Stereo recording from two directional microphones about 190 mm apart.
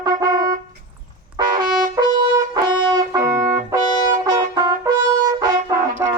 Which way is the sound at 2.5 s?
20° right (ahead or behind).